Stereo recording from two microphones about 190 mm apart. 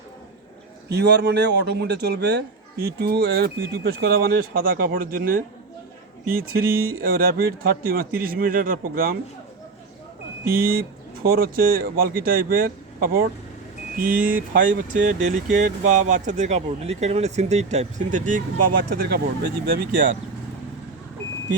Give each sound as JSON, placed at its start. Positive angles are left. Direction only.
{"t": 0.9, "sound": "a man's voice", "side_deg": -60}
{"t": 7.0, "sound": "speech", "side_deg": -50}
{"t": 10.5, "sound": "speech", "side_deg": -50}